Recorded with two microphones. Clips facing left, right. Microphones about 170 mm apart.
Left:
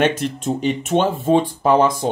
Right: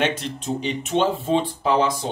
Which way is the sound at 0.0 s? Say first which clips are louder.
Left 5 dB; 50° left (ahead or behind).